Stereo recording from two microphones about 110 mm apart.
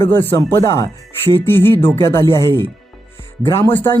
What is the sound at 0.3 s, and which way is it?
Speech, 25° left (ahead or behind).